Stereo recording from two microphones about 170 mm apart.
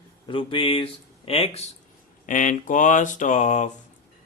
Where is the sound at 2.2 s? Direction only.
50° left (ahead or behind).